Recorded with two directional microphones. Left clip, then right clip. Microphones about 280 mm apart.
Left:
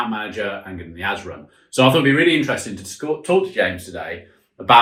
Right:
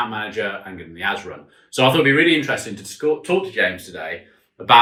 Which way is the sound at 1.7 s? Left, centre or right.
Centre.